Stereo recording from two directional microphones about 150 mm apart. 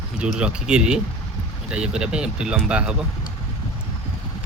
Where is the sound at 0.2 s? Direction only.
5° right (ahead or behind).